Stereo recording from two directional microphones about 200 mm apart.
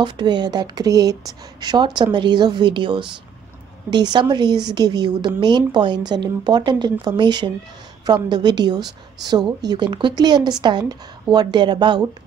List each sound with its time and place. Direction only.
0.0 s speech: 20° right (ahead or behind)